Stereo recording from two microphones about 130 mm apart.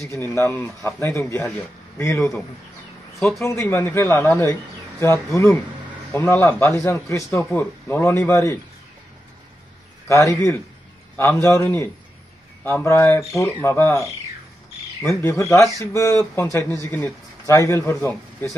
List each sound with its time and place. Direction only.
0.0 s speech: 20° left (ahead or behind)
3.4 s speech: 15° left (ahead or behind)
10.0 s a man's voice: 25° left (ahead or behind)
15.1 s speech: 20° left (ahead or behind)